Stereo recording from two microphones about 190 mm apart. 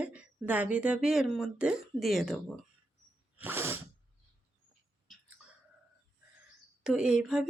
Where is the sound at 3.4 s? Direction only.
10° right (ahead or behind).